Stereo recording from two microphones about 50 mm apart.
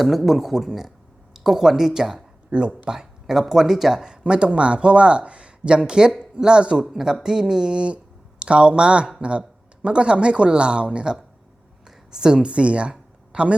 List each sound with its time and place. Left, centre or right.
0.0 s speech: centre
2.5 s speech: right
11.9 s a sound: centre